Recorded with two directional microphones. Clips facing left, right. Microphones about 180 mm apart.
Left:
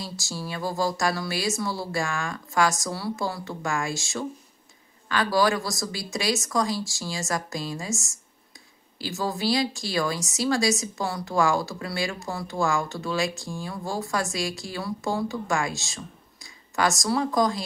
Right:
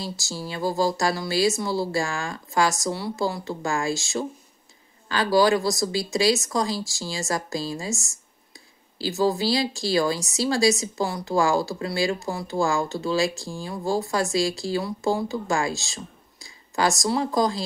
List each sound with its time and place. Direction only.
0.3 s speech: 25° right (ahead or behind)
8.9 s speech: 30° right (ahead or behind)